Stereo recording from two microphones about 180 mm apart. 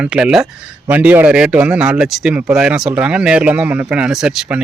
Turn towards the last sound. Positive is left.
turn(degrees=-5)  # may be behind; listen again after turning